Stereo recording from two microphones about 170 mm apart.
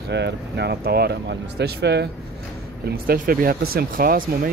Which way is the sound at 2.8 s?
60° right (ahead or behind).